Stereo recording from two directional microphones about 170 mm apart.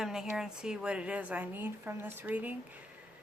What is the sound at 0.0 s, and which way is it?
Speech, 5° right (ahead or behind).